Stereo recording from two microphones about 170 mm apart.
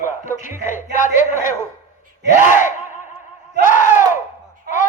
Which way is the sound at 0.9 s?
50° left (ahead or behind).